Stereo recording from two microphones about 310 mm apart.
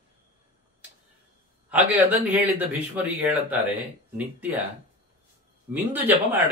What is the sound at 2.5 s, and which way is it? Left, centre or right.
Speech, centre.